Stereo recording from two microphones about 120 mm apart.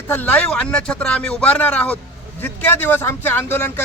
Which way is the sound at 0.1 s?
10° left (ahead or behind).